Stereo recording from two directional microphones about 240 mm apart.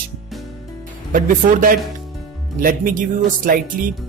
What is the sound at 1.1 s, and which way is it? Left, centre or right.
Speech, right.